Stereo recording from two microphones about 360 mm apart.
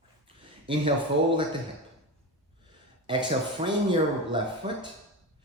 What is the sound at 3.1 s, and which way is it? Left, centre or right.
Speech, centre.